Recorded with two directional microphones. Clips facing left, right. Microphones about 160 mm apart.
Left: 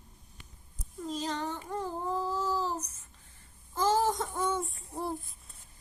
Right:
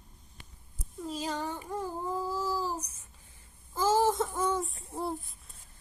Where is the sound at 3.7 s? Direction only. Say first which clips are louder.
Right 2 dB; 5° right (ahead or behind).